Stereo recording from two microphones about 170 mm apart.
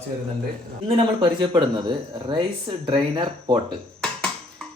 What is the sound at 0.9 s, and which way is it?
Speech, 30° right (ahead or behind).